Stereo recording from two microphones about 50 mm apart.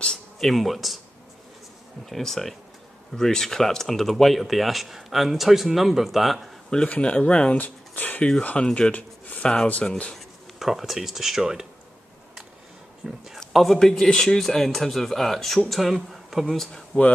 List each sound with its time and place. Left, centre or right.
0.4 s speech: centre
2.0 s speech: centre
6.9 s speech: left
8.2 s speech: left
10.1 s speech: centre
13.0 s a man's voice: centre
13.5 s a sound: centre
13.7 s speech: centre